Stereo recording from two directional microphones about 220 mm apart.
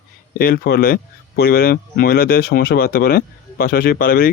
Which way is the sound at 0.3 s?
40° left (ahead or behind).